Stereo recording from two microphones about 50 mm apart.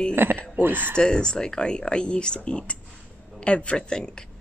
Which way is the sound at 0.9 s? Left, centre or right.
Centre.